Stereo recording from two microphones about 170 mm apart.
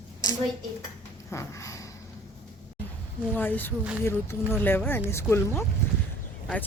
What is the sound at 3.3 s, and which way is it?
Speech, 10° left (ahead or behind).